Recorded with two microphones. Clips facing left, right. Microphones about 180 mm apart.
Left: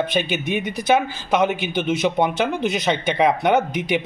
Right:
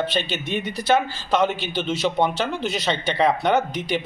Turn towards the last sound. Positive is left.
turn(degrees=15)  # may be behind; listen again after turning